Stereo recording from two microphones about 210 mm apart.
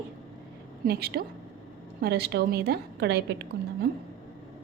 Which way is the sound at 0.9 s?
50° right (ahead or behind).